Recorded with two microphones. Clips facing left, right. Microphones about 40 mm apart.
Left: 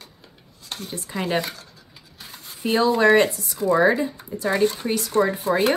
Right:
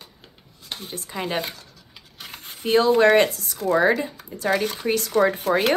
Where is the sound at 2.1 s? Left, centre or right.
Right.